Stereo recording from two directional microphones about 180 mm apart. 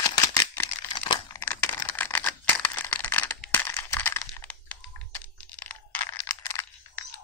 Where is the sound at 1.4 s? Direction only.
10° left (ahead or behind).